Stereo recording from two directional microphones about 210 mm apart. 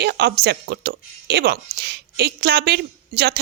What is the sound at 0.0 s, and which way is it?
Speech, 50° right (ahead or behind).